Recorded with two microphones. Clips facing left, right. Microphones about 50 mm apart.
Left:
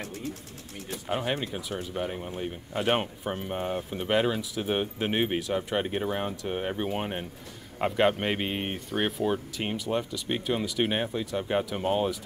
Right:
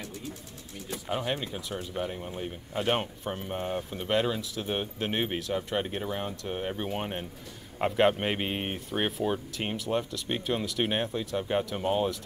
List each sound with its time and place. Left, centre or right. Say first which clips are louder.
0.0 s sewing machine: left 4 dB; left
1.0 s speech: left 2 dB; centre